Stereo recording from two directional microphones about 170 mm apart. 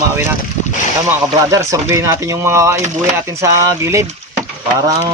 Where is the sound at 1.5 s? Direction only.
15° right (ahead or behind).